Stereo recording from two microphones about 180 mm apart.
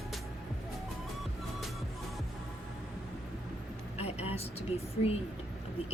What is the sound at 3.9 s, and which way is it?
Vehicle, 35° left (ahead or behind).